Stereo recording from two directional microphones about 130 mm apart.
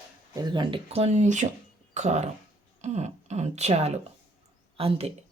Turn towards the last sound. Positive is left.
turn(degrees=-50)  # may be behind; listen again after turning